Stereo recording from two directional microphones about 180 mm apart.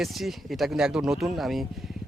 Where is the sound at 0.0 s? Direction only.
Centre (ahead or behind).